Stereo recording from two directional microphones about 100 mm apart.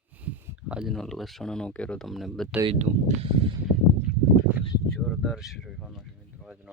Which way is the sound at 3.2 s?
65° right (ahead or behind).